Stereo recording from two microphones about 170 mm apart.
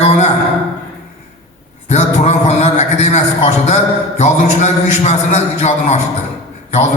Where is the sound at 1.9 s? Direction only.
40° left (ahead or behind).